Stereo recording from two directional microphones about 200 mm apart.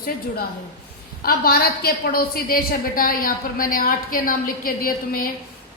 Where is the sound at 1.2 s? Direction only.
50° left (ahead or behind).